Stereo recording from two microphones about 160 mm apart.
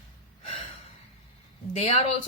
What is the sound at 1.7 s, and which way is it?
Speech, 40° left (ahead or behind).